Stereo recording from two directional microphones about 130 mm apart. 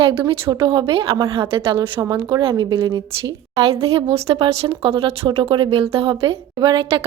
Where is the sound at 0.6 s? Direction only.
40° right (ahead or behind).